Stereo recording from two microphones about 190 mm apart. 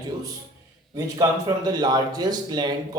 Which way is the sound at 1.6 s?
20° right (ahead or behind).